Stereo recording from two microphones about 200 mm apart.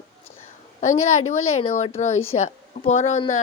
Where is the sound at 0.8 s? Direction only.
35° left (ahead or behind).